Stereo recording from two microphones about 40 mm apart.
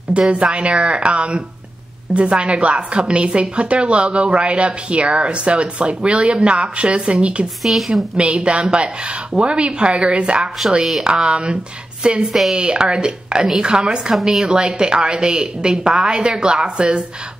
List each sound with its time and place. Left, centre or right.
0.3 s a woman's voice: right
7.6 s a woman's voice: centre
8.2 s a woman's voice: right